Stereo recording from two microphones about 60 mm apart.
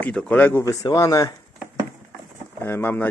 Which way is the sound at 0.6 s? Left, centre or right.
Left.